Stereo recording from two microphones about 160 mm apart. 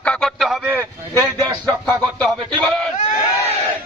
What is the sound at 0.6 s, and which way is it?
Speech, 15° right (ahead or behind).